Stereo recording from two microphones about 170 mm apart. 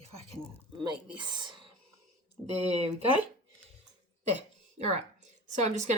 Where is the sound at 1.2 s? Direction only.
25° right (ahead or behind).